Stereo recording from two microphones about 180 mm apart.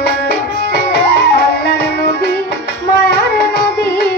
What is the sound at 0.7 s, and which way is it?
Music, 65° left (ahead or behind).